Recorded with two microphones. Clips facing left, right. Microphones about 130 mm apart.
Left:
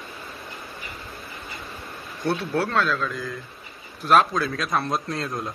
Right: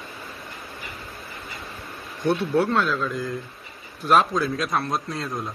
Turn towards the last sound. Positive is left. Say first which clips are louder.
# left 1 dB
turn(degrees=0)  # may be behind; listen again after turning